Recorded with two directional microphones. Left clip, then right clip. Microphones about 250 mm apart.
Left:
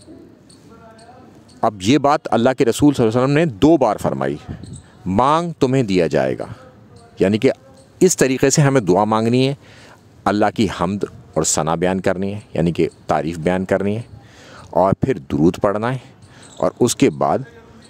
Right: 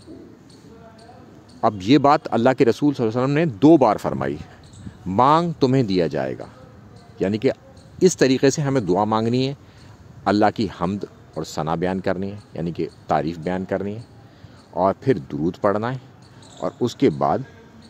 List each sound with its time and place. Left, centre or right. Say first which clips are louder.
1.6 s speech: left 1 dB; left
5.0 s speech: left 1 dB; left